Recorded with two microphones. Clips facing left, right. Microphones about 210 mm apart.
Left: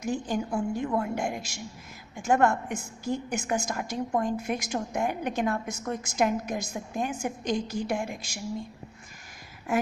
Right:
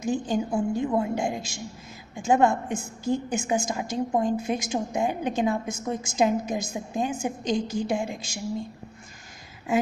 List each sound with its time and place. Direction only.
0.0 s a woman's voice: 20° right (ahead or behind)